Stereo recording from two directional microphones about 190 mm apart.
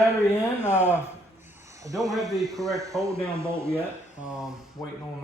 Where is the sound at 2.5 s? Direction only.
15° right (ahead or behind).